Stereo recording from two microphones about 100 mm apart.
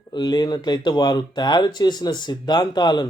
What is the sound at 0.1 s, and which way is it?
Speech, 45° left (ahead or behind).